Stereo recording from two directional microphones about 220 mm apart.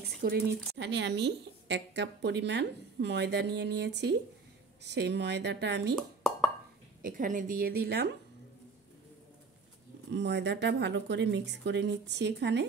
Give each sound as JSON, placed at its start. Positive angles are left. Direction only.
{"t": 0.2, "sound": "a woman's voice", "side_deg": -45}
{"t": 7.0, "sound": "a woman's voice", "side_deg": -40}
{"t": 10.1, "sound": "a woman's voice", "side_deg": -50}